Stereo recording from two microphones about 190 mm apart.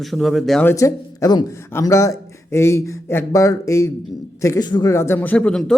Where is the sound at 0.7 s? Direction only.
15° left (ahead or behind).